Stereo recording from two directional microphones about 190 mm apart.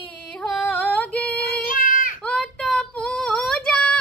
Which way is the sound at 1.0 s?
10° left (ahead or behind).